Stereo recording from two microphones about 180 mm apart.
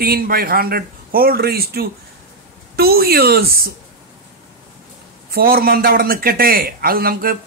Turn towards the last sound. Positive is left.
turn(degrees=-55)  # may be behind; listen again after turning